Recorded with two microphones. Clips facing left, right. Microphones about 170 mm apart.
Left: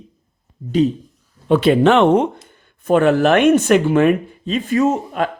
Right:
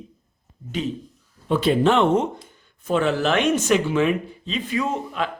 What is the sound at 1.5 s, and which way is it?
Speech, 65° left (ahead or behind).